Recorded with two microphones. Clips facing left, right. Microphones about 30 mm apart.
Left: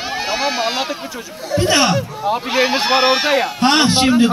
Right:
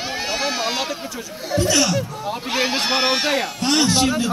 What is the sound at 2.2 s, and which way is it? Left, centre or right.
A man's voice, centre.